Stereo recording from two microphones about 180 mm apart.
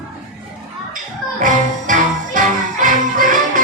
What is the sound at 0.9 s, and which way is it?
Music, 45° right (ahead or behind).